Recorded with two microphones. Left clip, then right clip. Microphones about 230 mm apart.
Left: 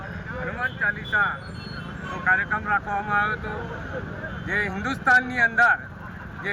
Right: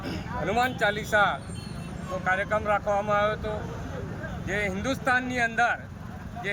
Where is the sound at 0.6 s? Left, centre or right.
Right.